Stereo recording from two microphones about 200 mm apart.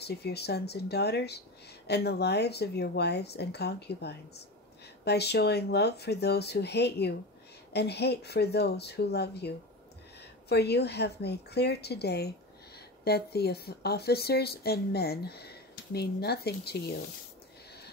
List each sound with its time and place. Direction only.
0.0 s a woman's voice: 55° left (ahead or behind)